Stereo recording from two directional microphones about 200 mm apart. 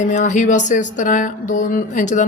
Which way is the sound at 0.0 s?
40° left (ahead or behind).